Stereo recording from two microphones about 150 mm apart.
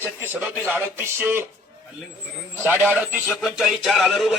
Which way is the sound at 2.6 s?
15° right (ahead or behind).